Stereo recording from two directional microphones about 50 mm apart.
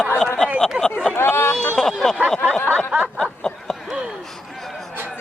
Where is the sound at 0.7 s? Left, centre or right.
Right.